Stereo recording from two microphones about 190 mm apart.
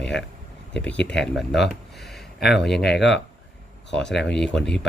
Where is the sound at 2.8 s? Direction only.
65° left (ahead or behind).